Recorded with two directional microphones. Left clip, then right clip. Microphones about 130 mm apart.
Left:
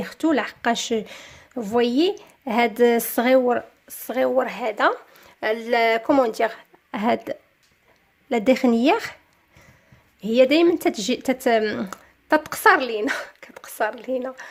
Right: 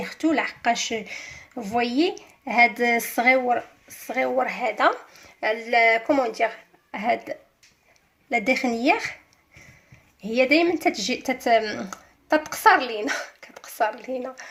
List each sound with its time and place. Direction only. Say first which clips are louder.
0.0 s speech: left 1 dB; 75° left (ahead or behind); by 7.3 s 90° left
8.3 s speech: left 3 dB; 70° left (ahead or behind)
10.2 s speech: left 3 dB; 60° left (ahead or behind)